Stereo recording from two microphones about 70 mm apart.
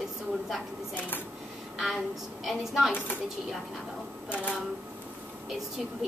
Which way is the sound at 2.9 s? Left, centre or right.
Left.